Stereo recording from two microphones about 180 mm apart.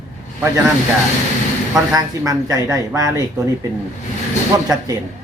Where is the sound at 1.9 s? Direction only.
20° right (ahead or behind).